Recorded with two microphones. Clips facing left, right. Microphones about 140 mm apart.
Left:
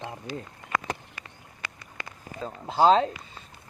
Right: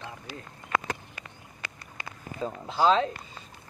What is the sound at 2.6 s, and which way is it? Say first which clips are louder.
Speech: left 3 dB; 35° left (ahead or behind).